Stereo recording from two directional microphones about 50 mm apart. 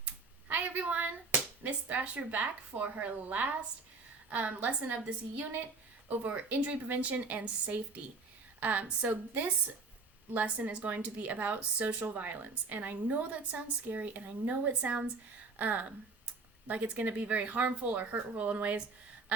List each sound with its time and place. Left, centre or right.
0.0 s a sound: right
4.3 s speech: right
6.1 s a woman's voice: right